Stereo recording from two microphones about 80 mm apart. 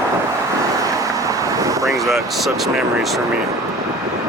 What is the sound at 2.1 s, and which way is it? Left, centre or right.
Speech, centre.